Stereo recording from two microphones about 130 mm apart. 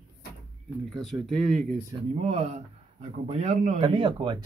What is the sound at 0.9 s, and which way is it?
Speech, centre (ahead or behind).